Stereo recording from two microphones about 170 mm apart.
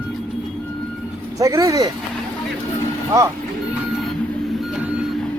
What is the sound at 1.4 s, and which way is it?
Speech, 20° right (ahead or behind).